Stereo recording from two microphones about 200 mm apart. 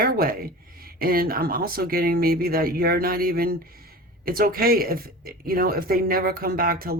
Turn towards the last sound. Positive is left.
turn(degrees=-50)  # may be behind; listen again after turning